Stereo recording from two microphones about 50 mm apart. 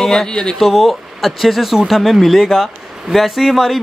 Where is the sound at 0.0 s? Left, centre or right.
Centre.